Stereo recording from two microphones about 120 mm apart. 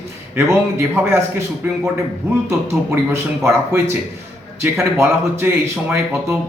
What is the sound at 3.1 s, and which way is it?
Speech, 25° right (ahead or behind).